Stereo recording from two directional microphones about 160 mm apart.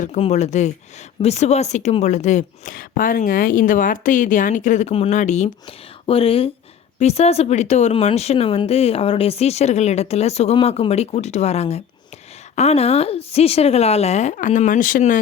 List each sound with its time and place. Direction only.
0.2 s a woman's voice: 45° left (ahead or behind)